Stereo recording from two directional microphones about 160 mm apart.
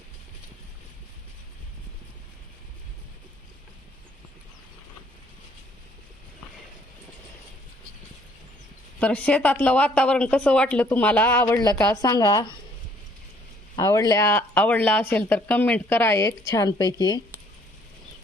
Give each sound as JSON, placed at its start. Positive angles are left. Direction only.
{"t": 9.0, "sound": "speech", "side_deg": 10}
{"t": 13.7, "sound": "speech", "side_deg": 20}